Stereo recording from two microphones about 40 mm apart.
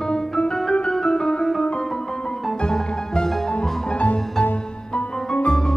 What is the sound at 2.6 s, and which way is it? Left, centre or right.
Music, centre.